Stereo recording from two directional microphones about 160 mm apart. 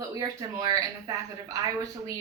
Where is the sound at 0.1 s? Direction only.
20° right (ahead or behind).